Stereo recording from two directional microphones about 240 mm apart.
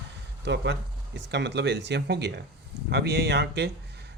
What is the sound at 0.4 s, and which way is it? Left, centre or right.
Speech, right.